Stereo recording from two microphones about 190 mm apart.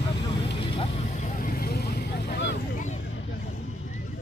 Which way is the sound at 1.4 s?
55° left (ahead or behind).